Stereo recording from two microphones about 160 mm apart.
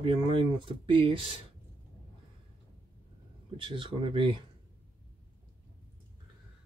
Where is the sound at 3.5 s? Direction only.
30° right (ahead or behind).